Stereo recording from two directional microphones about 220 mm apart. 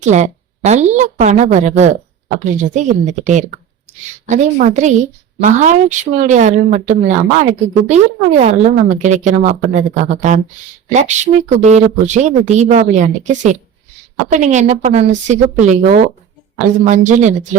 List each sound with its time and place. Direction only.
0.0 s a woman's voice: 30° right (ahead or behind)